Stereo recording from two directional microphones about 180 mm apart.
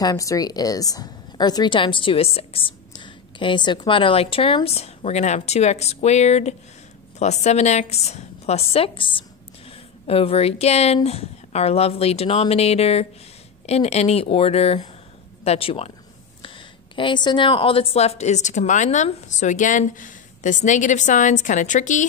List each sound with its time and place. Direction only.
0.0 s a woman's voice: 20° left (ahead or behind); by 22.0 s 45° left (ahead or behind)